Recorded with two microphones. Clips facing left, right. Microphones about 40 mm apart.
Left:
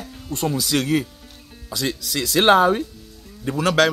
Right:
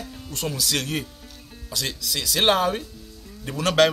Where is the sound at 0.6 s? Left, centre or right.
Centre.